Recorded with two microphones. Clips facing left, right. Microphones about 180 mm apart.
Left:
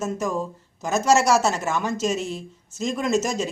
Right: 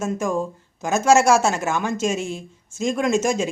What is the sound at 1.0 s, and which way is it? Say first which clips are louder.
Speech: right 3 dB; 50° right (ahead or behind).